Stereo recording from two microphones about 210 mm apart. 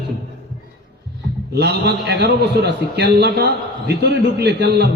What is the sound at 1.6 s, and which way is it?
A man's voice, 55° right (ahead or behind).